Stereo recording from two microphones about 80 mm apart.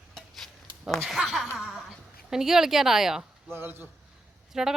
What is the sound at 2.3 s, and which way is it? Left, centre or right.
Speech, centre.